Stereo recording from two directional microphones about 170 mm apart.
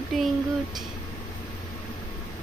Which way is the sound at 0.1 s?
Centre (ahead or behind).